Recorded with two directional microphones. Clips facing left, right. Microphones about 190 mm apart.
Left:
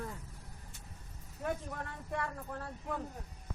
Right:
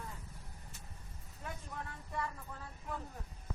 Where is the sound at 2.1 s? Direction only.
60° left (ahead or behind).